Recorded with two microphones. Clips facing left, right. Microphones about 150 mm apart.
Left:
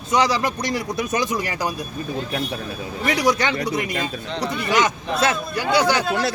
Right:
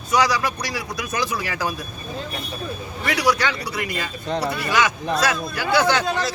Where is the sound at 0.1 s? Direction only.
25° left (ahead or behind).